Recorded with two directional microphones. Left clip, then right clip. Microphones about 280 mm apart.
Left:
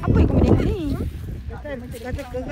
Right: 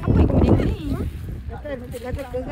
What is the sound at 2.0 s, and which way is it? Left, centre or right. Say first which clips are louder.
Speech: right 2 dB; right.